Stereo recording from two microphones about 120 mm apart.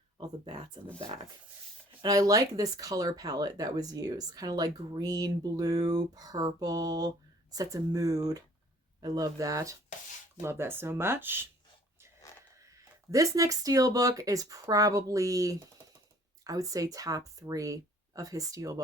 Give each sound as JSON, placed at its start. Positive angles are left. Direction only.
{"t": 2.0, "sound": "speech", "side_deg": -30}
{"t": 12.6, "sound": "speech", "side_deg": -25}